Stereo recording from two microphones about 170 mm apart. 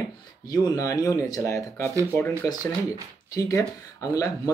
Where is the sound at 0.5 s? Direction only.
20° left (ahead or behind).